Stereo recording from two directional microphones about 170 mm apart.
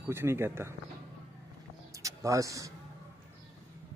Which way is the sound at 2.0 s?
20° right (ahead or behind).